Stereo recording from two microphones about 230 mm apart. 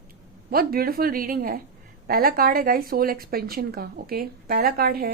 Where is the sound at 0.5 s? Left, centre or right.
Right.